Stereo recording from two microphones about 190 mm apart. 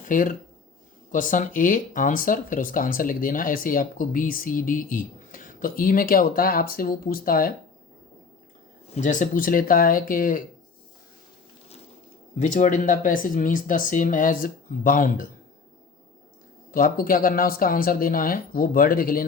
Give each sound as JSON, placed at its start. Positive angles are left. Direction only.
{"t": 0.0, "sound": "speech", "side_deg": 45}
{"t": 9.0, "sound": "speech", "side_deg": 40}
{"t": 12.4, "sound": "speech", "side_deg": 40}
{"t": 16.7, "sound": "speech", "side_deg": 50}